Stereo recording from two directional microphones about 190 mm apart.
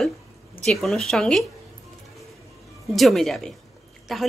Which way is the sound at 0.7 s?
Centre (ahead or behind).